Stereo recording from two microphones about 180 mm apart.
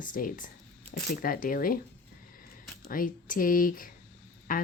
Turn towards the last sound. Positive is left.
turn(degrees=50)  # may be behind; listen again after turning